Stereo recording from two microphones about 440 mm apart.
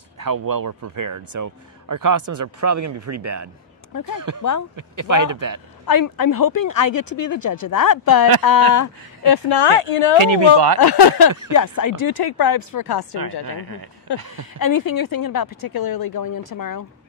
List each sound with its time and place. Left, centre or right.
0.2 s a man's voice: right
3.9 s speech: left
4.7 s speech: right
5.9 s speech: left
9.3 s speech: left
10.1 s speech: right
10.8 s speech: left
11.5 s speech: left
12.3 s speech: left
13.2 s speech: right
14.6 s speech: left